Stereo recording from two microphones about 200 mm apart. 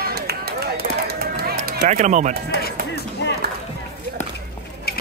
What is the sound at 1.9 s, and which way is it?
Speech, 35° right (ahead or behind).